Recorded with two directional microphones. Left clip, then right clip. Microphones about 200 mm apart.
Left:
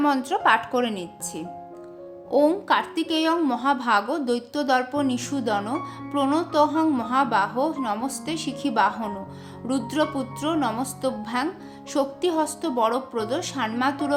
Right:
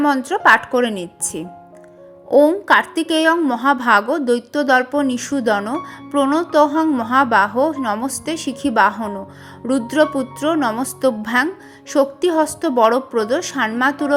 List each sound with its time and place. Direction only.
0.0 s a woman's voice: 20° right (ahead or behind)
2.9 s a woman's voice: 25° right (ahead or behind)